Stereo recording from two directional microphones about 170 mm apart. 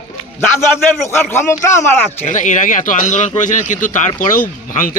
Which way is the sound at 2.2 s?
45° left (ahead or behind).